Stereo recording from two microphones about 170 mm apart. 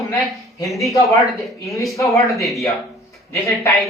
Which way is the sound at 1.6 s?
20° left (ahead or behind).